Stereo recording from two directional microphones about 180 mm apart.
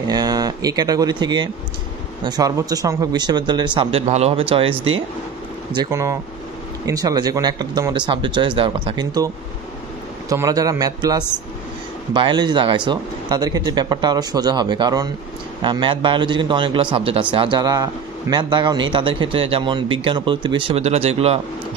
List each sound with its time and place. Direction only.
0.1 s a man's voice: 20° right (ahead or behind)
5.8 s a man's voice: 15° right (ahead or behind)
10.3 s a man's voice: 20° right (ahead or behind); by 21.4 s 35° right (ahead or behind)